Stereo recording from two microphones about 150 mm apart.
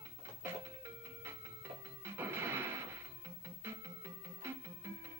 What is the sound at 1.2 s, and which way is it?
Music, 15° right (ahead or behind).